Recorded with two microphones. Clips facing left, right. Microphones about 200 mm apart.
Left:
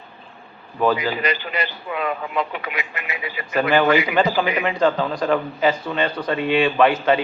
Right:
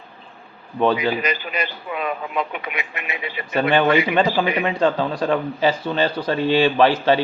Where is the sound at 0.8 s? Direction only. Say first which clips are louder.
Right 1 dB; 25° right (ahead or behind).